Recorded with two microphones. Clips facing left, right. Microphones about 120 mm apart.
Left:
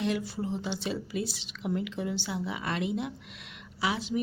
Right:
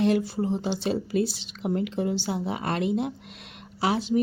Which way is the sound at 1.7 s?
45° right (ahead or behind).